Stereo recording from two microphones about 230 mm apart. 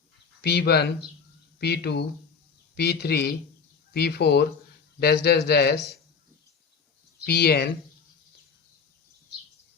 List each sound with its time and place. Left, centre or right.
0.4 s speech: left
7.3 s speech: left